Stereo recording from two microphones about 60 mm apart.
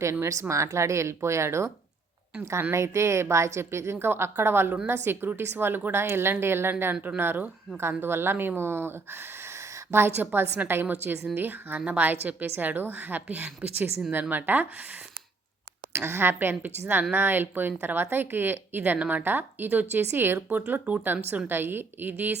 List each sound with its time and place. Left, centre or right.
0.0 s a woman's voice: right
2.7 s a woman's voice: right
9.9 s a woman's voice: right
16.0 s speech: right
21.4 s speech: right